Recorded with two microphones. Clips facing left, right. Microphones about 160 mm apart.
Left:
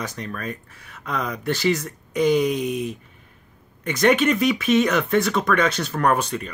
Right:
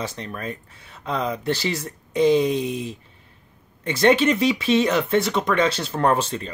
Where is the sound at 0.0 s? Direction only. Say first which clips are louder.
Even; 25° right (ahead or behind).